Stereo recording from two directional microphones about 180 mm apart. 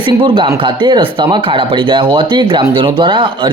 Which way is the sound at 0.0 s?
30° right (ahead or behind).